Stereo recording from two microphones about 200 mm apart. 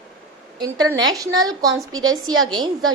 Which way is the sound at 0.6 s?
20° right (ahead or behind).